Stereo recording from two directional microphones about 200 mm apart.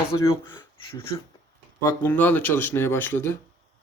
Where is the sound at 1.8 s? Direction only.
10° left (ahead or behind).